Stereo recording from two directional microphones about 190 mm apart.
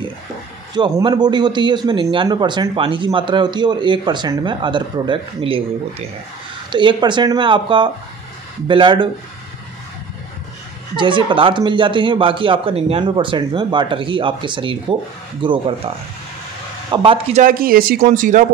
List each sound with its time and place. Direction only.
0.7 s a man's voice: 20° right (ahead or behind)
11.0 s a man's voice: 25° right (ahead or behind)
16.9 s a man's voice: 30° right (ahead or behind)
17.4 s speech: 50° right (ahead or behind)